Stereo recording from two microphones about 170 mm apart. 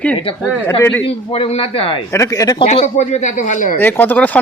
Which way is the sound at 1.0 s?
35° left (ahead or behind).